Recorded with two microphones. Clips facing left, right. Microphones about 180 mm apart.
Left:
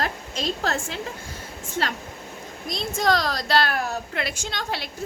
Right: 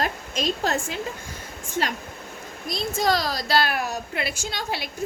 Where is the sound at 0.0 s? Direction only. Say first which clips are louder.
Right 2 dB; 15° right (ahead or behind).